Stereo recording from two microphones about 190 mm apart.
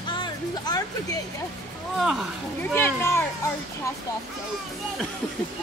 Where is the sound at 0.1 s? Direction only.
20° left (ahead or behind).